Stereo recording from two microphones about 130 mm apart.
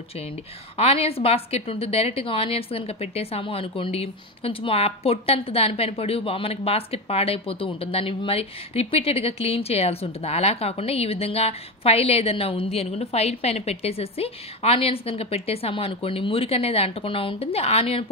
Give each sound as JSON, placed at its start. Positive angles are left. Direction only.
{"t": 0.7, "sound": "a woman's voice", "side_deg": 50}